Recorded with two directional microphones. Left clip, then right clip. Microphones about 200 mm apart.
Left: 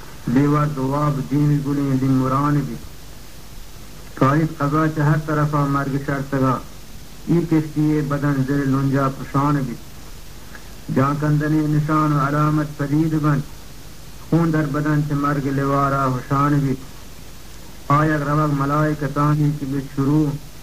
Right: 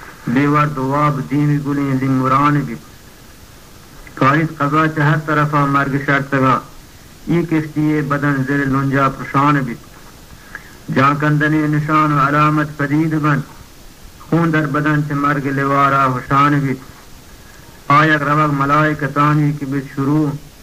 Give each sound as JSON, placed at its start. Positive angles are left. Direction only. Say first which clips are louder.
{"t": 0.3, "sound": "a man's voice", "louder": "right 4 dB", "side_deg": -35}
{"t": 4.2, "sound": "a man's voice", "louder": "right 5 dB", "side_deg": -35}
{"t": 11.0, "sound": "a man's voice", "louder": "right 7 dB", "side_deg": -35}
{"t": 17.8, "sound": "a man's voice", "louder": "right 7 dB", "side_deg": -30}